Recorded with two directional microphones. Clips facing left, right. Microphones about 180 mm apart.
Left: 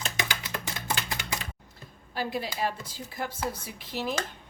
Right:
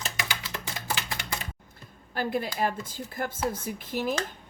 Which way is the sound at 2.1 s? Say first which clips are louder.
Right 3 dB; 50° right (ahead or behind).